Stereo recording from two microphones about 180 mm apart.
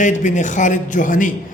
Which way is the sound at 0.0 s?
45° left (ahead or behind).